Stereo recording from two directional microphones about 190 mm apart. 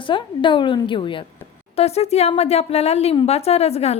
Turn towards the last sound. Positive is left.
turn(degrees=35)  # may be behind; listen again after turning